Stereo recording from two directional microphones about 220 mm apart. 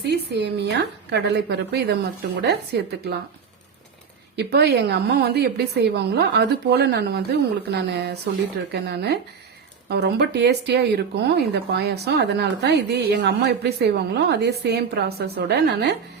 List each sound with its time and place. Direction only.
0.0 s speech: 50° right (ahead or behind)
4.4 s speech: 50° right (ahead or behind)